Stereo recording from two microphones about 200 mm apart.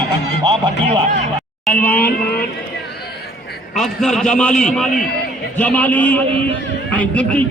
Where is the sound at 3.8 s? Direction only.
Centre (ahead or behind).